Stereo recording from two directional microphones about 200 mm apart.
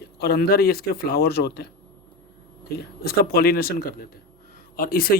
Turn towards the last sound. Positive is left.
turn(degrees=45)  # may be behind; listen again after turning